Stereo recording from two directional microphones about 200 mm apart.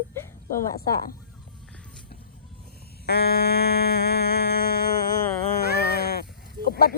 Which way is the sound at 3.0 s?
55° left (ahead or behind).